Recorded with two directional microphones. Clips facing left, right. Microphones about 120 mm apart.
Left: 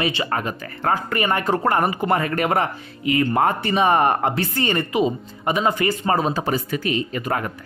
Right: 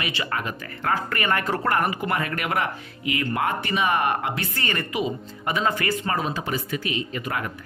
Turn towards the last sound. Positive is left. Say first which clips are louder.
# left 5 dB
turn(degrees=45)  # may be behind; listen again after turning